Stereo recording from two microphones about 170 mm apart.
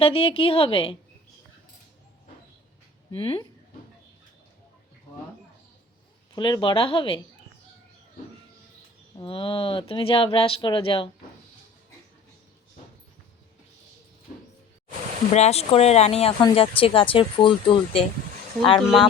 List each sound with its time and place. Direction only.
0.0 s speech: 35° left (ahead or behind)
3.1 s speech: 30° left (ahead or behind)
6.3 s speech: 25° left (ahead or behind)
9.1 s speech: 30° left (ahead or behind)
15.3 s speech: 40° left (ahead or behind)
18.8 s speech: centre (ahead or behind)